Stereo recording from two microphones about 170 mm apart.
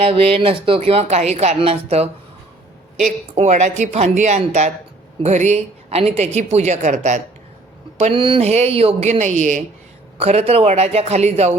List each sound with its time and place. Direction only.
0.0 s speech: 35° right (ahead or behind)
3.3 s speech: 45° right (ahead or behind)